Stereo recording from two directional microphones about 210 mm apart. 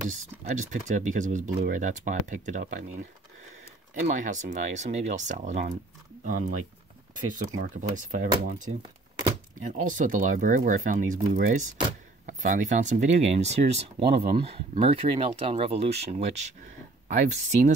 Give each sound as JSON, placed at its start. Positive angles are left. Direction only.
{"t": 0.1, "sound": "speech", "side_deg": -35}
{"t": 4.1, "sound": "speech", "side_deg": -35}
{"t": 7.6, "sound": "speech", "side_deg": -40}
{"t": 9.2, "sound": "a sound", "side_deg": -35}
{"t": 9.8, "sound": "speech", "side_deg": -35}